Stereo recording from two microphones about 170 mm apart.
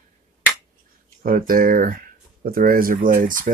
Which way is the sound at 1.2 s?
55° right (ahead or behind).